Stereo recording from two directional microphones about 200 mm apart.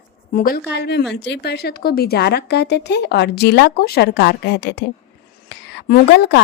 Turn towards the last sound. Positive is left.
turn(degrees=55)  # may be behind; listen again after turning